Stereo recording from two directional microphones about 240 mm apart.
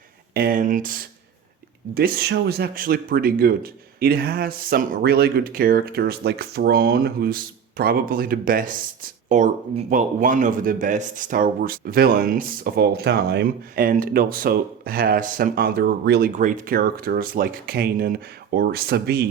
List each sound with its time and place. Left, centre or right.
0.3 s speech: right